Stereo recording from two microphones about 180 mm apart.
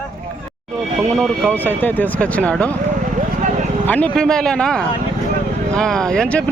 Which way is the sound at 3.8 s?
10° left (ahead or behind).